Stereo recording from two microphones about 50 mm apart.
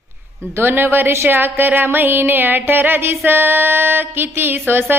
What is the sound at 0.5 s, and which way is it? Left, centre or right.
Music, right.